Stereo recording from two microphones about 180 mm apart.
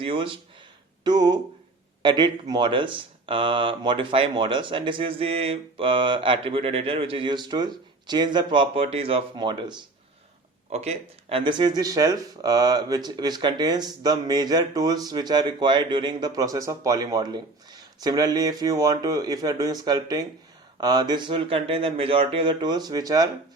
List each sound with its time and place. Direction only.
0.0 s speech: 30° right (ahead or behind)
10.7 s speech: 35° right (ahead or behind)